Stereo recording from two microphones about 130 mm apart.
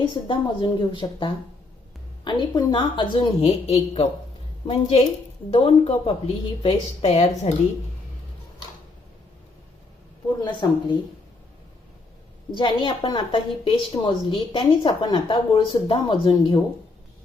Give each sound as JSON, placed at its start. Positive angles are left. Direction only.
{"t": 0.0, "sound": "a woman's voice", "side_deg": 40}
{"t": 3.4, "sound": "speech", "side_deg": 55}
{"t": 10.4, "sound": "a woman's voice", "side_deg": 35}
{"t": 12.5, "sound": "a woman's voice", "side_deg": 40}